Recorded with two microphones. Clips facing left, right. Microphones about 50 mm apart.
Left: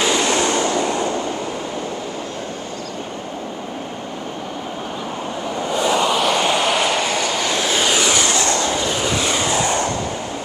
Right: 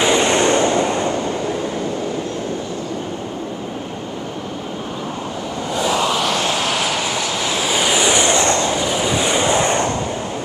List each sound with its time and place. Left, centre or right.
0.0 s vehicle: right
5.7 s vehicle: centre; by 8.6 s right
8.6 s vehicle: centre; by 9.9 s right